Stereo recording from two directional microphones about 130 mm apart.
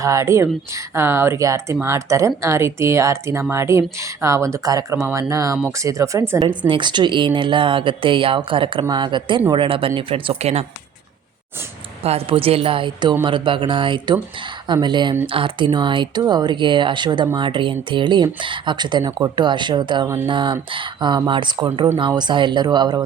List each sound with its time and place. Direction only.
0.0 s speech: 25° right (ahead or behind)
6.5 s speech: 35° right (ahead or behind)
12.0 s speech: 50° right (ahead or behind)